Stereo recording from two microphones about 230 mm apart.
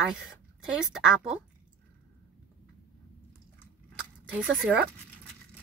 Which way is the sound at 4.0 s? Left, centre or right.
Centre.